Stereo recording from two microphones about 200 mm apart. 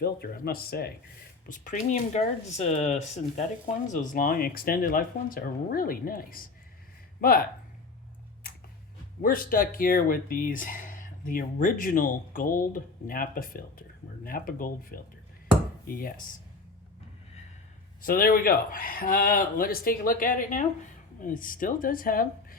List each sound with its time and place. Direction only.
0.0 s speech: 50° left (ahead or behind)
1.5 s speech: 40° left (ahead or behind)
9.2 s speech: 45° left (ahead or behind)
18.0 s speech: 45° left (ahead or behind)